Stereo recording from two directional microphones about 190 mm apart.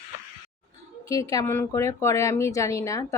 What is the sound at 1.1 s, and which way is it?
A woman's voice, 20° left (ahead or behind).